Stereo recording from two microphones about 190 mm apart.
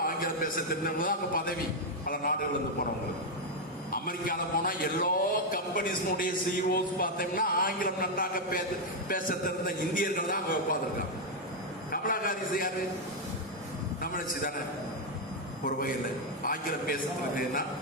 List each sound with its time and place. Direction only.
0.0 s a man's voice: 50° left (ahead or behind)
3.9 s a man's voice: 50° left (ahead or behind)
11.9 s a sound: 50° left (ahead or behind)
14.0 s a man's voice: 50° left (ahead or behind)
15.6 s a man's voice: 45° left (ahead or behind)